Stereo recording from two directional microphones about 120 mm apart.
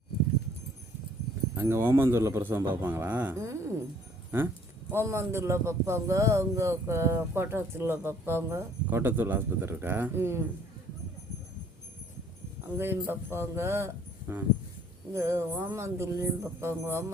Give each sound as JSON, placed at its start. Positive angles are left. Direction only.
{"t": 1.5, "sound": "a man's voice", "side_deg": -20}
{"t": 12.7, "sound": "a man's voice", "side_deg": -20}